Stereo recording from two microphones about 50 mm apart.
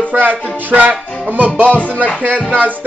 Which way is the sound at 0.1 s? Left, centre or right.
Right.